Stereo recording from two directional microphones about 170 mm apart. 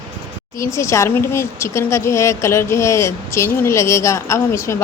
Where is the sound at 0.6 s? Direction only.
15° left (ahead or behind).